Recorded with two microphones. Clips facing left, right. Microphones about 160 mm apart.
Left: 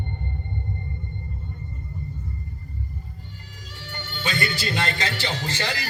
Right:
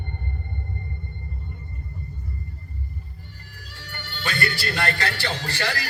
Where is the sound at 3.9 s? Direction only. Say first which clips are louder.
Left 2 dB; 20° left (ahead or behind).